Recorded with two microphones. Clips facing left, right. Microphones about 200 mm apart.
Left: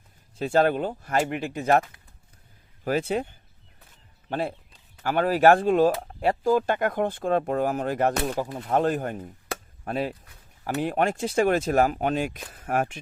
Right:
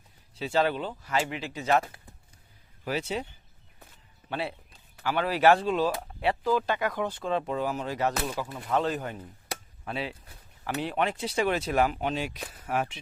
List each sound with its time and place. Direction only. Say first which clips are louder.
0.3 s speech: left 5 dB; 50° left (ahead or behind)
2.8 s speech: left 6 dB; 50° left (ahead or behind)
9.5 s chop: left 5 dB; 45° left (ahead or behind)
10.6 s speech: left 4 dB; 45° left (ahead or behind)